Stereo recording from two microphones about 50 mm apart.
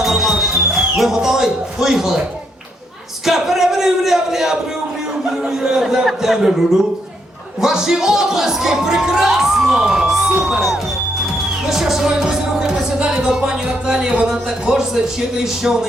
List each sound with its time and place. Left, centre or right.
0.0 s music: centre
3.2 s a sound: centre
5.5 s music: centre
10.5 s speech: centre
11.6 s music: centre